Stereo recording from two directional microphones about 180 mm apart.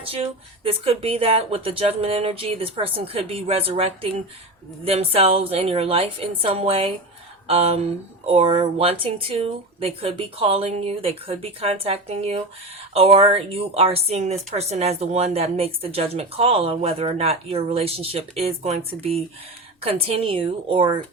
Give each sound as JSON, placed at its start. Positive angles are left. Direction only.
{"t": 0.0, "sound": "a woman's voice", "side_deg": -30}